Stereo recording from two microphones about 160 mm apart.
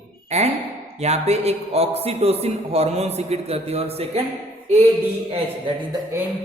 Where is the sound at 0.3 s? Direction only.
45° right (ahead or behind).